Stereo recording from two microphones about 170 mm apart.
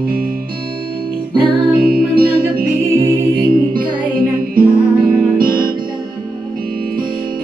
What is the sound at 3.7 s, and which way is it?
Music, 60° right (ahead or behind).